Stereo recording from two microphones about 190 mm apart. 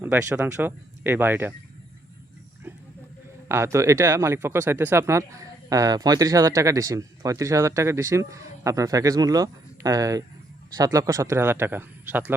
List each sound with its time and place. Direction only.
0.0 s speech: 15° right (ahead or behind)
3.5 s speech: 15° right (ahead or behind)